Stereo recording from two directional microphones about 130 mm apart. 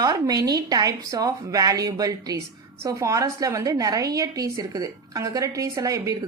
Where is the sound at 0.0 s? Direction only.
30° right (ahead or behind).